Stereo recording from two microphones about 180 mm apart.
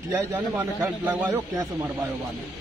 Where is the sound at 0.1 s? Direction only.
20° right (ahead or behind).